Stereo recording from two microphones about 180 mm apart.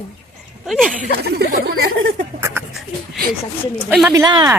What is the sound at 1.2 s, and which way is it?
Speech, 65° right (ahead or behind).